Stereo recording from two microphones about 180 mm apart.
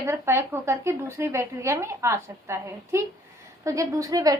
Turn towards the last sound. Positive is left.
turn(degrees=-20)  # may be behind; listen again after turning